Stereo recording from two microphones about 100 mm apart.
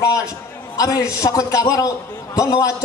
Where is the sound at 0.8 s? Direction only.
35° left (ahead or behind).